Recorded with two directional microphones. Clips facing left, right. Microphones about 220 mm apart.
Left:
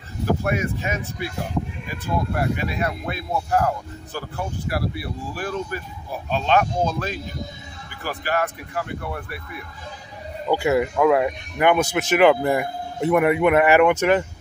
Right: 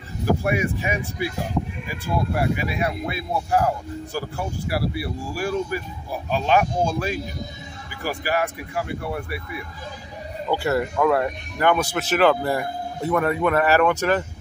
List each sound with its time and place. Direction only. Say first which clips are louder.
0.4 s speech: right 1 dB; 15° right (ahead or behind)
2.3 s speech: right 1 dB; 10° right (ahead or behind)
10.5 s speech: left 3 dB; 10° left (ahead or behind)